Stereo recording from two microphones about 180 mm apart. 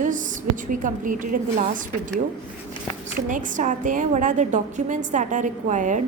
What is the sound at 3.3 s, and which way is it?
A woman's voice, 45° right (ahead or behind).